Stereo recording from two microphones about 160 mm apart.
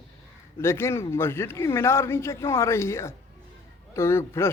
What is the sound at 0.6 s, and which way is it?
A man's voice, 15° left (ahead or behind).